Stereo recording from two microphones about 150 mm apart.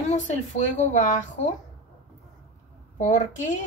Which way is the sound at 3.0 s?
55° left (ahead or behind).